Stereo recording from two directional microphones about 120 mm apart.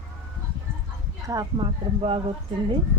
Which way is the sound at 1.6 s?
50° right (ahead or behind).